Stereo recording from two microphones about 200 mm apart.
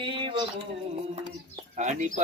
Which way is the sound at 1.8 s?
35° right (ahead or behind).